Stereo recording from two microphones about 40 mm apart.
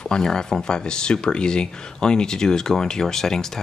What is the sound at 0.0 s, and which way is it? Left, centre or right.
Speech, centre.